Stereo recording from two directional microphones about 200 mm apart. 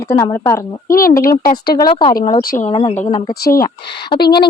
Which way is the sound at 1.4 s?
45° left (ahead or behind).